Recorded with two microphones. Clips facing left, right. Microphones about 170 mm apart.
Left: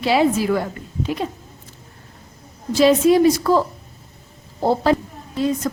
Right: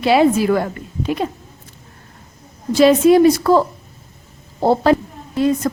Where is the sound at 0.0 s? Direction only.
60° right (ahead or behind).